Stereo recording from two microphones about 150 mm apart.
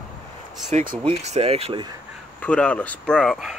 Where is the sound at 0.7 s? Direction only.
50° right (ahead or behind).